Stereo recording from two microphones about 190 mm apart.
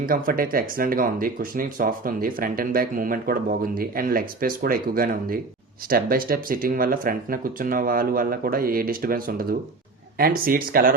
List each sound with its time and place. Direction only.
0.0 s speech: 45° right (ahead or behind)